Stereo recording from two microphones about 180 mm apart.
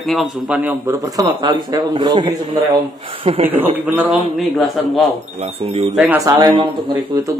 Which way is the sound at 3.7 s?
10° right (ahead or behind).